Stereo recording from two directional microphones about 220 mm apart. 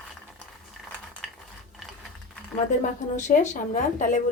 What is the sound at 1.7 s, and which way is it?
Ratchet, centre (ahead or behind).